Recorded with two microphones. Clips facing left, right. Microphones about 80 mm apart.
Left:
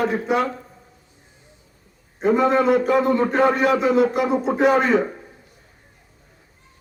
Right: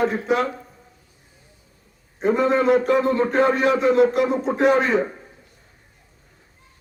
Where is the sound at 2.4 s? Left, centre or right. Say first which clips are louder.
Right 1 dB; left.